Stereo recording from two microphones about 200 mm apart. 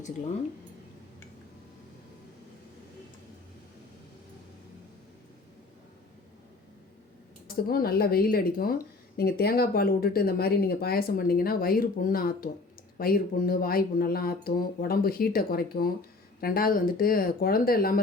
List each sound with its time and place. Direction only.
7.4 s speech: 45° left (ahead or behind)